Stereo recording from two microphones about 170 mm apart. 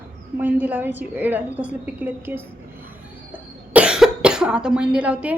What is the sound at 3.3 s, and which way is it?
Cough, 5° right (ahead or behind).